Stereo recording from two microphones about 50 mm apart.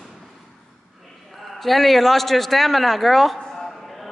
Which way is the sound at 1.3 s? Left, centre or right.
Centre.